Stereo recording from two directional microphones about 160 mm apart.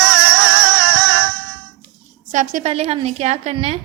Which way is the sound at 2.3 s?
50° right (ahead or behind).